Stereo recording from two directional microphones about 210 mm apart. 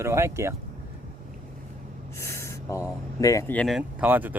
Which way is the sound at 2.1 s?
15° left (ahead or behind).